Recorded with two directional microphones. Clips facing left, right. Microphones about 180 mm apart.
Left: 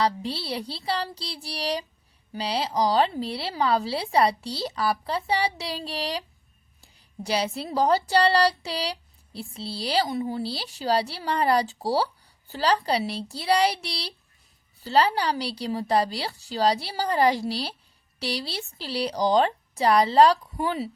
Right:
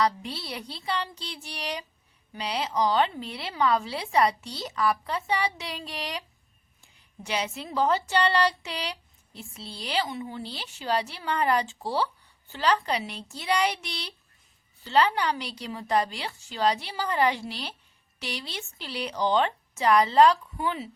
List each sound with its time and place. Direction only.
0.0 s a woman's voice: 30° left (ahead or behind)